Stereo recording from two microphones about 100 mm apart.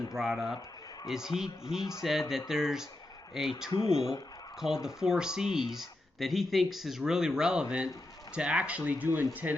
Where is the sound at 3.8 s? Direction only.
65° left (ahead or behind).